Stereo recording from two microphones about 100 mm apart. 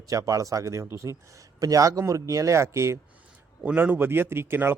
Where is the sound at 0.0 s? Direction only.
35° right (ahead or behind).